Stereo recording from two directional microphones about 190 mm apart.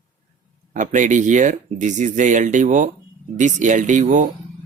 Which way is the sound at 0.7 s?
40° right (ahead or behind).